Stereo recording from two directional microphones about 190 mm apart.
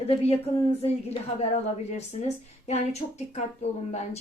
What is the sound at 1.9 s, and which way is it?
Speech, 35° left (ahead or behind).